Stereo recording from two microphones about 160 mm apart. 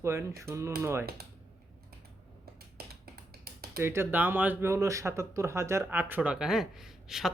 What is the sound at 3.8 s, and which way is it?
Speech, 15° right (ahead or behind).